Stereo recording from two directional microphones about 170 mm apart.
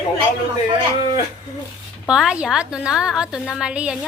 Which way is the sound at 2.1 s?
5° right (ahead or behind).